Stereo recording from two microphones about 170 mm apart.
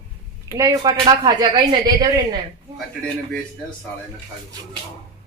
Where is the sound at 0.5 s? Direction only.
20° right (ahead or behind).